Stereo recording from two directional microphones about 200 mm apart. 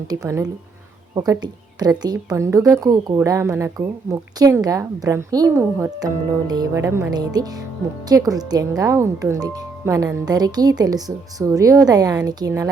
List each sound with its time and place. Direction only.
0.1 s a woman's voice: 15° right (ahead or behind)